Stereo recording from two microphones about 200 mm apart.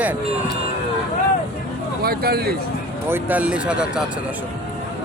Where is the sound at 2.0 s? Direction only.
50° right (ahead or behind).